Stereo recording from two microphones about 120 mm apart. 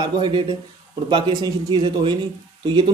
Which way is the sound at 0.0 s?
40° right (ahead or behind).